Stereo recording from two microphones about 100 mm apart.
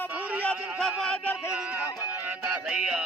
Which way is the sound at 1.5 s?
15° right (ahead or behind).